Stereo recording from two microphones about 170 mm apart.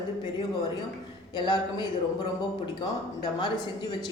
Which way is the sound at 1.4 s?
25° left (ahead or behind).